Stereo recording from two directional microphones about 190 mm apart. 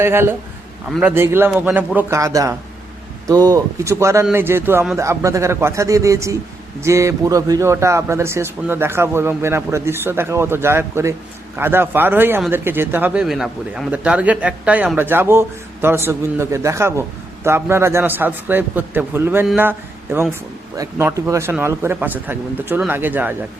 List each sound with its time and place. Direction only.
0.0 s speech: 10° right (ahead or behind)
0.9 s a man's voice: centre (ahead or behind)
1.1 s speech: 10° right (ahead or behind)
20.7 s speech: 15° right (ahead or behind)